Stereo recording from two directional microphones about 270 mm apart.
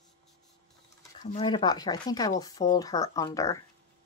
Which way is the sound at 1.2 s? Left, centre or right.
Left.